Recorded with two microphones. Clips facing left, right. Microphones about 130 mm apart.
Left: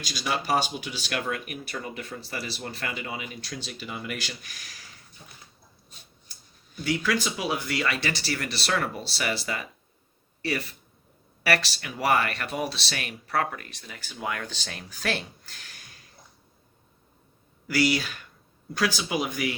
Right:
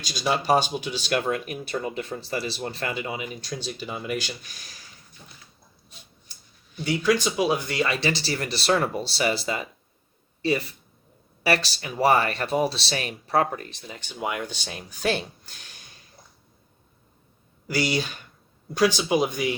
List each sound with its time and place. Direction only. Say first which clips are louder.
0.1 s speech: right 5 dB; 25° right (ahead or behind)
6.8 s speech: right 4 dB; 20° right (ahead or behind)
11.4 s speech: right 2 dB; 25° right (ahead or behind)
17.7 s speech: left 1 dB; 25° right (ahead or behind)